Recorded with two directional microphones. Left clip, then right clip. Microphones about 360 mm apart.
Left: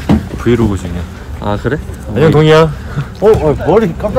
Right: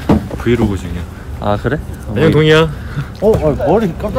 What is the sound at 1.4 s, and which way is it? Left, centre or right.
Speech, centre.